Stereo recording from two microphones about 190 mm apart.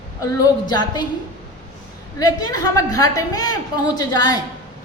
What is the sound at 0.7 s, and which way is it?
Speech, 20° left (ahead or behind).